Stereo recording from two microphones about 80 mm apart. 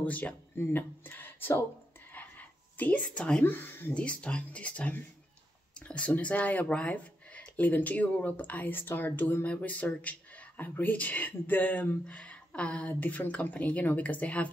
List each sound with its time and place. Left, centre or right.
0.0 s speech: centre
2.1 s a sound: left
3.4 s speech: left
3.9 s speech: centre